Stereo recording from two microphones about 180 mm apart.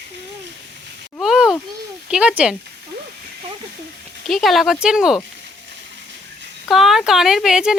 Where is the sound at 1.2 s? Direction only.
Centre (ahead or behind).